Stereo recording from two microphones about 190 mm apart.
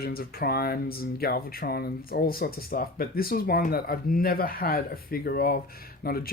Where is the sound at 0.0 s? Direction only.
50° left (ahead or behind).